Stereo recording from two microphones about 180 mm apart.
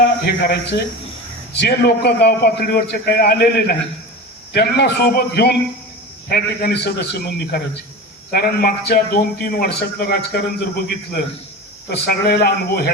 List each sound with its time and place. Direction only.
0.0 s a man's voice: 60° left (ahead or behind)
11.9 s a man's voice: 65° left (ahead or behind)